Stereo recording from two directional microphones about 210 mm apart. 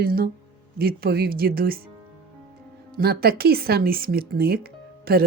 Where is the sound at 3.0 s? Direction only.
50° right (ahead or behind).